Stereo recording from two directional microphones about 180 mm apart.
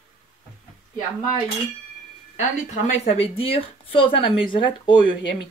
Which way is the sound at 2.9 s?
35° left (ahead or behind).